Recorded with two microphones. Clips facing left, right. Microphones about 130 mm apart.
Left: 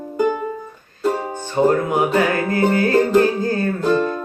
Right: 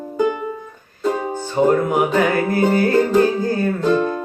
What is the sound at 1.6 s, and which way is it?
Music, 15° right (ahead or behind).